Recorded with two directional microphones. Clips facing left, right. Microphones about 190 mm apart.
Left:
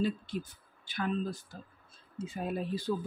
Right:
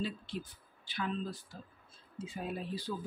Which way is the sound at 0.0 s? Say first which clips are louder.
Left 6 dB; 45° left (ahead or behind).